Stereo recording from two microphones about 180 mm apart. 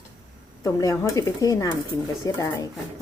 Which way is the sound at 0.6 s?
20° left (ahead or behind).